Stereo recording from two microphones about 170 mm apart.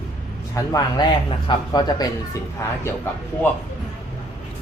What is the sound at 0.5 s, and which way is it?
Speech, 20° left (ahead or behind).